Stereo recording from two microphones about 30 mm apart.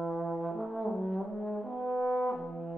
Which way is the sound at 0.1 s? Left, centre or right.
Centre.